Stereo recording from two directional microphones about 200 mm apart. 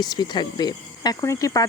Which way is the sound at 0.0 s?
20° left (ahead or behind).